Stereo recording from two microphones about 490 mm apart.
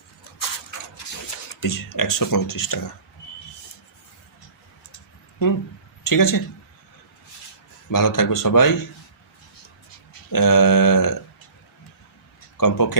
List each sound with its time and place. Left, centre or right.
1.6 s speech: left
6.0 s speech: left
7.9 s speech: left
10.1 s a sound: left
12.5 s speech: left